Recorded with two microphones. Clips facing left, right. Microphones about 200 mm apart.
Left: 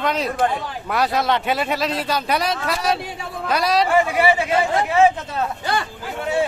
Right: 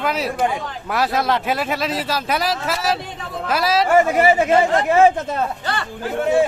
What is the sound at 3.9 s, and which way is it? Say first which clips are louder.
A man's voice: right 6 dB; 45° right (ahead or behind).